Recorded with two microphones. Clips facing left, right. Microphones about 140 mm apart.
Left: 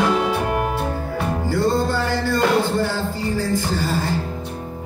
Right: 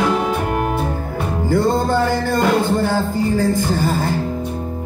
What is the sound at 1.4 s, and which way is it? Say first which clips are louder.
Music: right 4 dB; 50° right (ahead or behind).